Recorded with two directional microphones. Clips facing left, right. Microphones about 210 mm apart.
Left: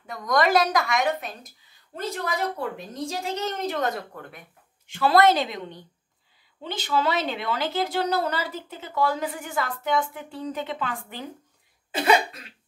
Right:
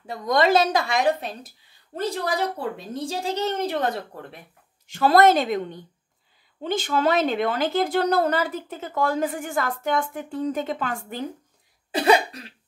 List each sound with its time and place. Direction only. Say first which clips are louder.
0.0 s a woman's voice: right 2 dB; 30° right (ahead or behind)
4.8 s speech: right 2 dB; 45° right (ahead or behind)